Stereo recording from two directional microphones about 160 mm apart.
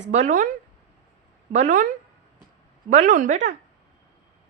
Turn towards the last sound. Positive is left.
turn(degrees=-50)  # may be behind; listen again after turning